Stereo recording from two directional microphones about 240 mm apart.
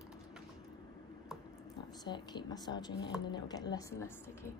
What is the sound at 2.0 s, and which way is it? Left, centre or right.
A woman's voice, centre.